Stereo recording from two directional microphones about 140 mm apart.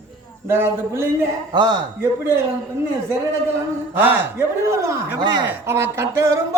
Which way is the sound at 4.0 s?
15° right (ahead or behind).